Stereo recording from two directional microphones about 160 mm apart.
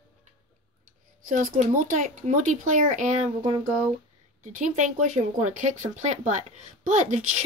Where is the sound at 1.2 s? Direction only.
55° right (ahead or behind).